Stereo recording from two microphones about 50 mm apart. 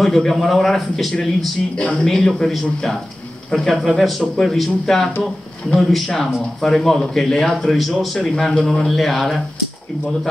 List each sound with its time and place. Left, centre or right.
0.0 s speech: centre
1.8 s speech: left
2.0 s speech: centre